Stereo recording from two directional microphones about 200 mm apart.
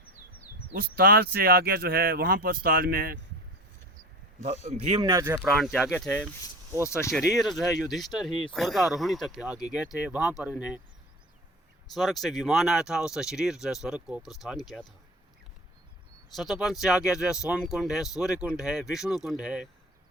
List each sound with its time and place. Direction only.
0.7 s speech: 50° right (ahead or behind)
4.7 s speech: 40° right (ahead or behind)
5.0 s speech: 15° right (ahead or behind)
5.5 s speech: centre (ahead or behind)
7.1 s speech: centre (ahead or behind)
11.9 s speech: centre (ahead or behind)
16.3 s speech: centre (ahead or behind)